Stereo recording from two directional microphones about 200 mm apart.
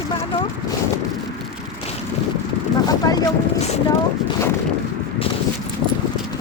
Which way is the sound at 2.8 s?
20° left (ahead or behind).